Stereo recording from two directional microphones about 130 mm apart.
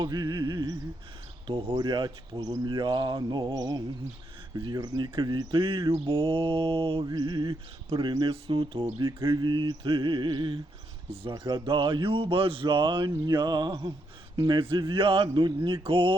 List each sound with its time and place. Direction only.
0.0 s mantra: 30° right (ahead or behind)
14.3 s speech: 35° right (ahead or behind)